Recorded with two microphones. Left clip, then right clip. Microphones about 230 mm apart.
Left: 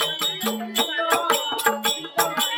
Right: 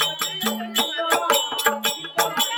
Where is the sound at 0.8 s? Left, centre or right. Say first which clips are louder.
Even; centre.